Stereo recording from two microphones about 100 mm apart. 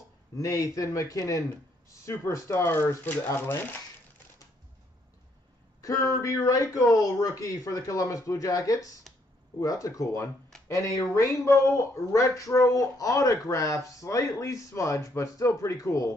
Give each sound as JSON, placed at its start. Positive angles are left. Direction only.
{"t": 0.4, "sound": "speech", "side_deg": 35}
{"t": 5.8, "sound": "speech", "side_deg": 35}